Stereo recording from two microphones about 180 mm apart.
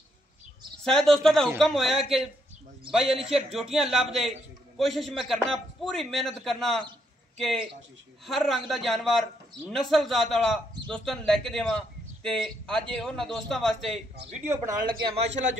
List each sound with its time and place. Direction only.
0.8 s a man's voice: 5° left (ahead or behind)
14.3 s speech: 15° right (ahead or behind)